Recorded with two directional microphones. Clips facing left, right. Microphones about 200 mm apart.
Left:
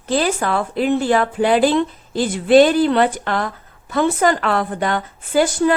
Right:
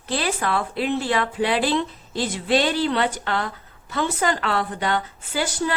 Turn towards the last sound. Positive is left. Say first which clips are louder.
# left 9 dB
turn(degrees=50)  # may be behind; listen again after turning